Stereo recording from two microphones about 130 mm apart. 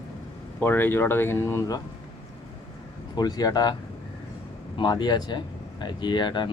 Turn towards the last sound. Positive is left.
turn(degrees=35)  # may be behind; listen again after turning